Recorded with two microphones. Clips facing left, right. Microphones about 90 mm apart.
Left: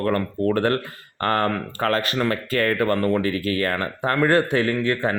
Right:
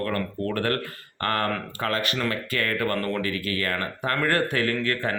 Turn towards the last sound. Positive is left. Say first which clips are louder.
# left 4 dB
turn(degrees=20)  # may be behind; listen again after turning